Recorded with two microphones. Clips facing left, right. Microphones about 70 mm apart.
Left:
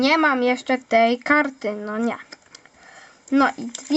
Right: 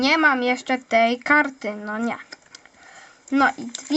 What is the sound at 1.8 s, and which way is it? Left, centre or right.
Speech, centre.